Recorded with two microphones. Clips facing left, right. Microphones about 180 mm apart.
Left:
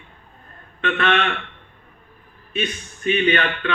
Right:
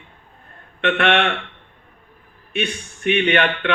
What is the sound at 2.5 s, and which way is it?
A man's voice, 70° right (ahead or behind).